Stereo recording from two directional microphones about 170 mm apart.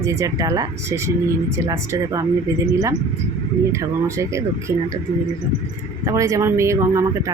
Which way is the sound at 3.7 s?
15° right (ahead or behind).